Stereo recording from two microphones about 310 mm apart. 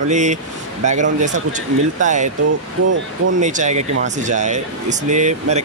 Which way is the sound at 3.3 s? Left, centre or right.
Right.